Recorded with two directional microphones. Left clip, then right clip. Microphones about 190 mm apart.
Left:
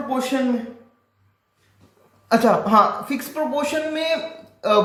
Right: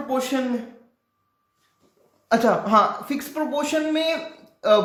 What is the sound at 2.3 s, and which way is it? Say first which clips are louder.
A man's voice: left 2 dB; 20° right (ahead or behind).